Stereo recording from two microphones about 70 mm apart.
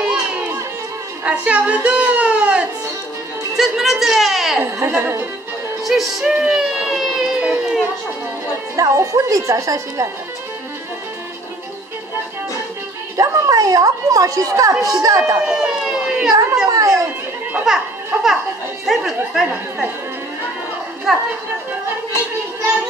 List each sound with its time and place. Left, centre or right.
1.2 s speech: centre
3.5 s speech: centre
4.6 s speech: right
5.9 s speech: centre
6.4 s a sound: centre
8.7 s a woman's voice: right
13.2 s a woman's voice: right
15.3 s a sound: centre
16.6 s children playing: right
17.6 s a child's voice: centre
21.1 s speech: centre